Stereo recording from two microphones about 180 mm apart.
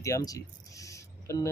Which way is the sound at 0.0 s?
20° left (ahead or behind).